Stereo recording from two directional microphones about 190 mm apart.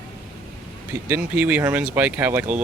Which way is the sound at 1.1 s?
10° right (ahead or behind).